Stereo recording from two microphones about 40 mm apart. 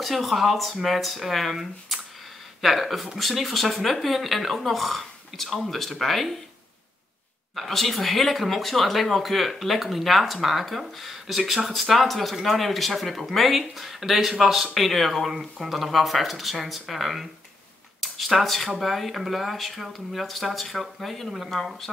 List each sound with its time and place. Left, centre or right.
0.0 s speech: centre
7.5 s speech: centre
14.7 s speech: centre